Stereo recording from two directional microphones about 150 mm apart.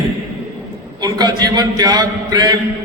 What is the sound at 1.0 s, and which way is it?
A man's voice, 25° right (ahead or behind).